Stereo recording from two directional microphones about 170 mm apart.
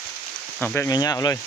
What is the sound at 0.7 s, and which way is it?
Speech, 20° left (ahead or behind).